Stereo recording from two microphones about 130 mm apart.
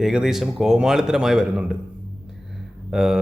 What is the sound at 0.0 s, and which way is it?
A man's voice, 5° right (ahead or behind).